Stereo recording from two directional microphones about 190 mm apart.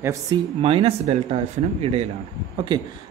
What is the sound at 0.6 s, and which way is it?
Speech, 30° right (ahead or behind).